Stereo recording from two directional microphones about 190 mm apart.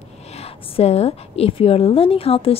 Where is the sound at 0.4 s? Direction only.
35° left (ahead or behind).